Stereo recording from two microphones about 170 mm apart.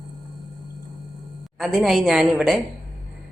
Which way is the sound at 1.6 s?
Centre (ahead or behind).